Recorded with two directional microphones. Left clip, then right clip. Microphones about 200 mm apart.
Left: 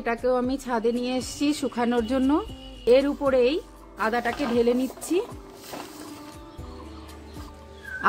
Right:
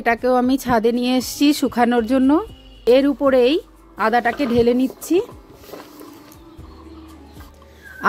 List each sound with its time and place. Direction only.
0.0 s speech: 45° right (ahead or behind)
8.0 s dog: 35° right (ahead or behind)